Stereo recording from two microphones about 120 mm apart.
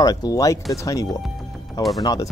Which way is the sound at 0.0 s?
30° left (ahead or behind).